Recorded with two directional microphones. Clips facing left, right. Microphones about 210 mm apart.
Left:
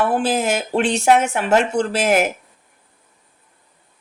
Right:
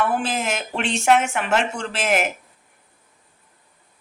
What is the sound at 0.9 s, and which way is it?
Speech, 40° left (ahead or behind).